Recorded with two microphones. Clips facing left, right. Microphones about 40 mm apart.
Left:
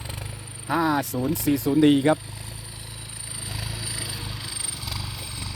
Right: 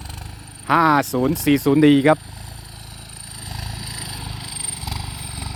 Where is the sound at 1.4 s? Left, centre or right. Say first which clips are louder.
Right 5 dB; right.